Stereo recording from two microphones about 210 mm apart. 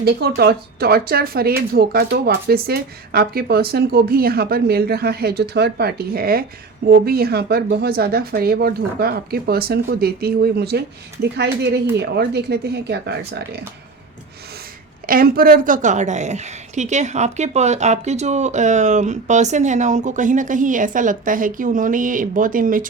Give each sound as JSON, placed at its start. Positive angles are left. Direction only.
{"t": 0.0, "sound": "speech", "side_deg": -50}
{"t": 15.0, "sound": "a woman's voice", "side_deg": -45}